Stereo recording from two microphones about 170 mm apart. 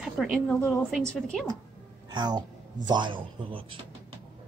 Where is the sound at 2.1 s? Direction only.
25° right (ahead or behind).